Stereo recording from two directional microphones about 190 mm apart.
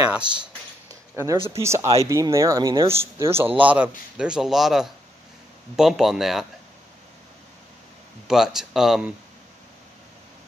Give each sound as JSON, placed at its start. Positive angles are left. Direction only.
{"t": 1.1, "sound": "a man's voice", "side_deg": -15}
{"t": 8.3, "sound": "a man's voice", "side_deg": 0}